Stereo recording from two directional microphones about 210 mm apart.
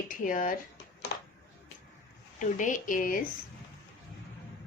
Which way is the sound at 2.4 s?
35° left (ahead or behind).